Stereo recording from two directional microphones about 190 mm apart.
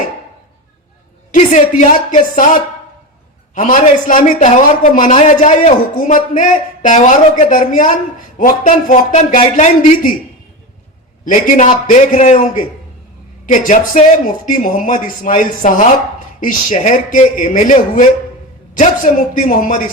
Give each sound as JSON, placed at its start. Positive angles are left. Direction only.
{"t": 1.3, "sound": "speech", "side_deg": 40}
{"t": 11.3, "sound": "a man's voice", "side_deg": 40}